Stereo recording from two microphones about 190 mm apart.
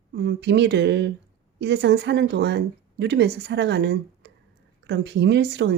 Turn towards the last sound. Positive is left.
turn(degrees=-65)  # may be behind; listen again after turning